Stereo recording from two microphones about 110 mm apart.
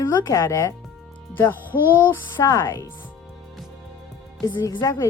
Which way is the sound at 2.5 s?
30° left (ahead or behind).